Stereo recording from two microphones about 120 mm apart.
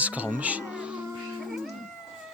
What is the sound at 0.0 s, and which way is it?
Speech, 10° right (ahead or behind).